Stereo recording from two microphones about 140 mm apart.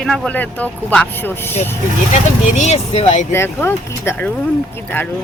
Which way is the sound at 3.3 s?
20° left (ahead or behind).